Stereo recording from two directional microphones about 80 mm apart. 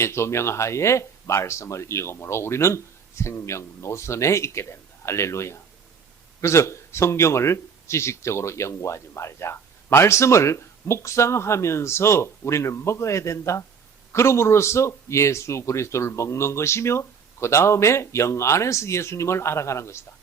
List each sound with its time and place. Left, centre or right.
0.0 s speech: left